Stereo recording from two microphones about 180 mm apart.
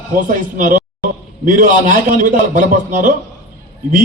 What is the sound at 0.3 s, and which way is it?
A man's voice, 50° right (ahead or behind).